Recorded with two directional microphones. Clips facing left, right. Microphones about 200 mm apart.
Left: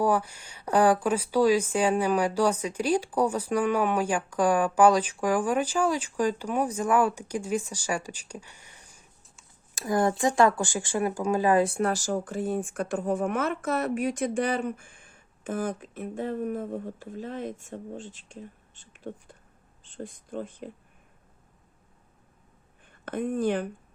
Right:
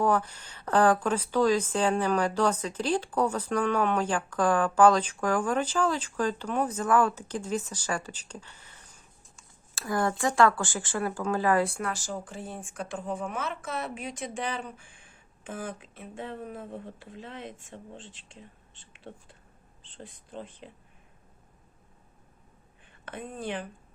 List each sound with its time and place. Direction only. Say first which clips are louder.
0.0 s speech: left 1 dB; 10° left (ahead or behind)
11.8 s speech: left 7 dB; 40° left (ahead or behind)
22.9 s speech: left 10 dB; 45° left (ahead or behind)